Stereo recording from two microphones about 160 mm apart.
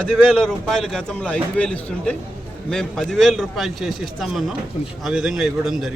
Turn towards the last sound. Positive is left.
turn(degrees=0)  # may be behind; listen again after turning